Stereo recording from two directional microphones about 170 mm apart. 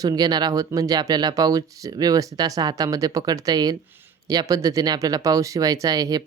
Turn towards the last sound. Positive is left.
turn(degrees=-20)  # may be behind; listen again after turning